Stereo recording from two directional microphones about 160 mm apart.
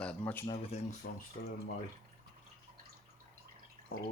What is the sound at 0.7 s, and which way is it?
Speech, 40° left (ahead or behind).